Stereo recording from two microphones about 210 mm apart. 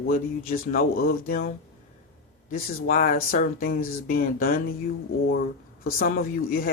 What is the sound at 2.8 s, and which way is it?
Speech, 40° left (ahead or behind).